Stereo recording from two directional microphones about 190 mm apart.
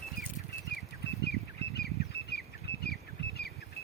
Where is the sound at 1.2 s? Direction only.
60° left (ahead or behind).